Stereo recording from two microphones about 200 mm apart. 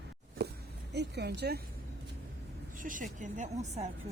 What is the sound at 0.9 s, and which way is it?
Speech, 55° right (ahead or behind).